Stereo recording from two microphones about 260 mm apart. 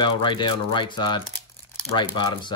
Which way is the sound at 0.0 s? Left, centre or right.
Centre.